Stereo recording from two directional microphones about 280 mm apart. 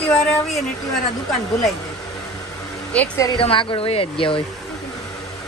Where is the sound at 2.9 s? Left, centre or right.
Centre.